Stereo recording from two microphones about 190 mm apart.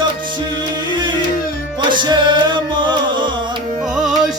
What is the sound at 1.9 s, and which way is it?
Music, 25° right (ahead or behind).